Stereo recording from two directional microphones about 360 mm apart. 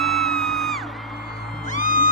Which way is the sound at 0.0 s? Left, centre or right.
Centre.